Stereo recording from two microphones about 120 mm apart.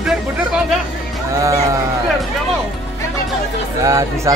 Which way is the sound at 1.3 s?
25° right (ahead or behind).